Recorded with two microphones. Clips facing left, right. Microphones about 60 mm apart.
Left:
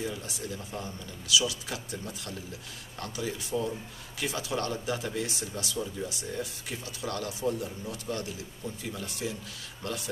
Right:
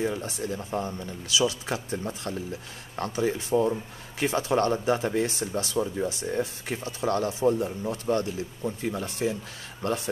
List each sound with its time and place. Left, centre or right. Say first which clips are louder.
0.0 s speech: right 7 dB; right